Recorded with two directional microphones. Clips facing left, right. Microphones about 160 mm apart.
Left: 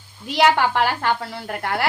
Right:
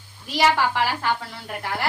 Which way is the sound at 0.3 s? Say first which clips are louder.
Left 3 dB; 60° left (ahead or behind).